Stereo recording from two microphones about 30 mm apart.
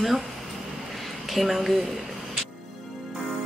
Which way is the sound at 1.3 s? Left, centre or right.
Centre.